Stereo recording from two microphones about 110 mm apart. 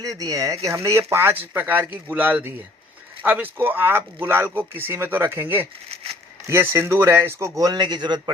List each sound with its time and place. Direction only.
0.0 s speech: 30° right (ahead or behind)